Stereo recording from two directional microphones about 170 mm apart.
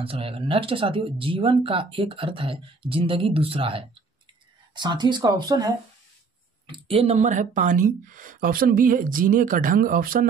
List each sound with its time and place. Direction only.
0.0 s speech: 35° right (ahead or behind)
6.7 s speech: 35° right (ahead or behind); by 10.2 s 55° right (ahead or behind)